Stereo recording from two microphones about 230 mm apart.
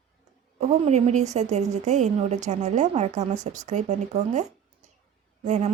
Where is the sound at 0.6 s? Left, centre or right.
Right.